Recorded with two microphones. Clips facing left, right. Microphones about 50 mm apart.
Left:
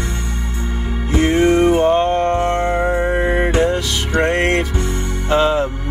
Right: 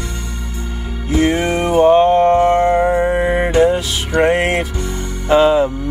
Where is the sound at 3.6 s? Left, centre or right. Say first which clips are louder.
Right 2 dB; centre.